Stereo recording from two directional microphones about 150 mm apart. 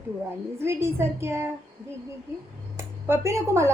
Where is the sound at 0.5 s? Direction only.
15° right (ahead or behind).